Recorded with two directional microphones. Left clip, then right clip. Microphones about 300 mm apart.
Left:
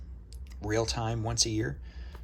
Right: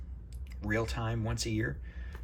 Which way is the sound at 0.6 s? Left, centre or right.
Centre.